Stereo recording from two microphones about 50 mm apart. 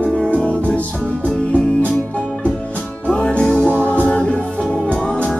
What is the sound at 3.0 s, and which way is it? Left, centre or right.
Music, left.